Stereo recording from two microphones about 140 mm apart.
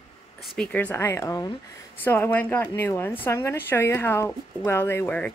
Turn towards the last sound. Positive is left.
turn(degrees=15)  # may be behind; listen again after turning